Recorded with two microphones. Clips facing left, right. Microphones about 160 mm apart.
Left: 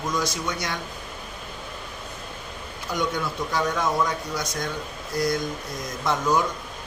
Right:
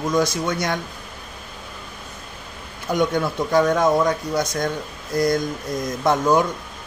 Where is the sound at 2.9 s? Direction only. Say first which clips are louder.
Right 7 dB; 50° right (ahead or behind).